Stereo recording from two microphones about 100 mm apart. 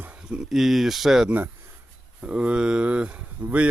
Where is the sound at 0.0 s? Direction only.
10° right (ahead or behind).